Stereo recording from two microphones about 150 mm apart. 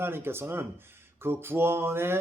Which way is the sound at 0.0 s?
15° right (ahead or behind).